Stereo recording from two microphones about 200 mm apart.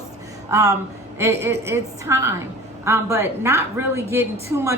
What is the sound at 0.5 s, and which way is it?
A woman's voice, 15° right (ahead or behind).